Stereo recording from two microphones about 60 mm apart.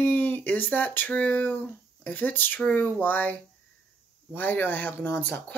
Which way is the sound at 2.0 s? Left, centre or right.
Left.